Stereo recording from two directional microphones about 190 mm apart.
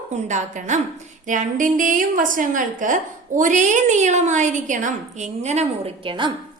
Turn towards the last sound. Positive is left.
turn(degrees=-25)  # may be behind; listen again after turning